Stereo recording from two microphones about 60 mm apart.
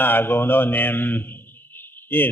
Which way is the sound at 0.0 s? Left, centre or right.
Left.